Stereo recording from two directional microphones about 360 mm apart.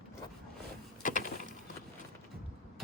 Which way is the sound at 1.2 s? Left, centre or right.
Left.